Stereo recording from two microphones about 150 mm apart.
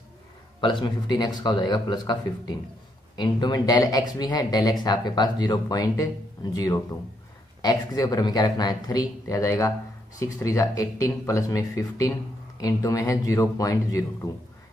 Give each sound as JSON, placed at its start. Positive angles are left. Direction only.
{"t": 0.6, "sound": "speech", "side_deg": 30}
{"t": 3.2, "sound": "speech", "side_deg": 30}